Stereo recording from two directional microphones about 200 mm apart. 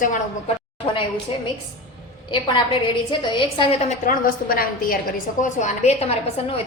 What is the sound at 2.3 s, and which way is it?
A woman's voice, 25° left (ahead or behind).